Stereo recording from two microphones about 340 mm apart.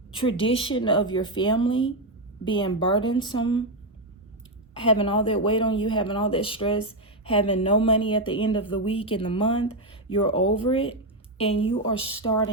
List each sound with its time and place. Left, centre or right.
0.2 s speech: centre
4.9 s speech: centre